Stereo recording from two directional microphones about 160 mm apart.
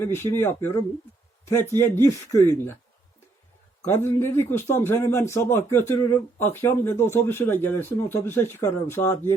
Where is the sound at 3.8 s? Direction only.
15° left (ahead or behind).